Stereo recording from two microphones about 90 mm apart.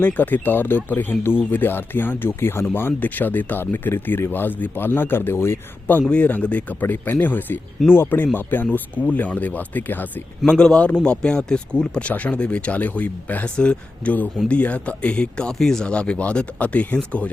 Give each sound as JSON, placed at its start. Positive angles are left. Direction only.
{"t": 0.0, "sound": "speech", "side_deg": 15}
{"t": 6.1, "sound": "speech", "side_deg": 15}
{"t": 10.5, "sound": "speech", "side_deg": 10}